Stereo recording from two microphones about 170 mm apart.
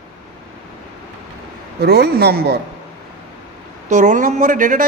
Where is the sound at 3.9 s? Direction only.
50° right (ahead or behind).